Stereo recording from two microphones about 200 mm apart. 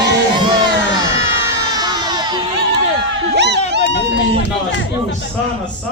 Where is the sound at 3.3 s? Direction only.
60° right (ahead or behind).